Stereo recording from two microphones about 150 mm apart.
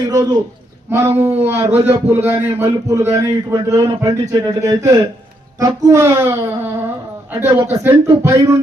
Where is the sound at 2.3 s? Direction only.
15° right (ahead or behind).